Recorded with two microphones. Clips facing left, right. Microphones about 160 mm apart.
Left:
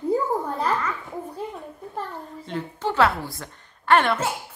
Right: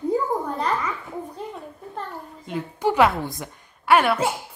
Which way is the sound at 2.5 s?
10° right (ahead or behind).